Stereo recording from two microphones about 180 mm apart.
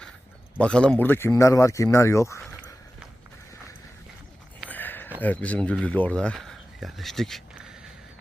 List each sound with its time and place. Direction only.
0.6 s speech: 5° left (ahead or behind)
4.7 s a sound: 10° left (ahead or behind)
5.2 s speech: 10° left (ahead or behind)